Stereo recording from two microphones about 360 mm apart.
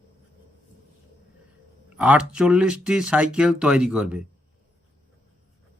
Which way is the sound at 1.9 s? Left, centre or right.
Centre.